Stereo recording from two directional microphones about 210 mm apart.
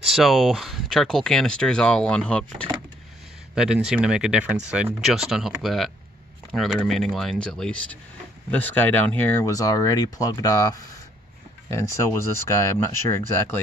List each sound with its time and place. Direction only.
0.0 s speech: centre (ahead or behind)